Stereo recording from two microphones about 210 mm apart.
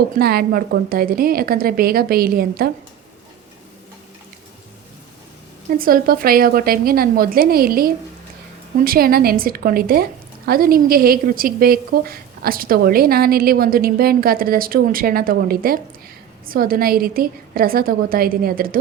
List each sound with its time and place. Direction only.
0.2 s a woman's voice: 45° right (ahead or behind)
5.7 s a woman's voice: 45° right (ahead or behind)